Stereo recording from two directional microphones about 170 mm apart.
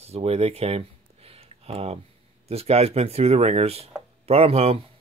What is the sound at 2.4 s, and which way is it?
Speech, 35° right (ahead or behind).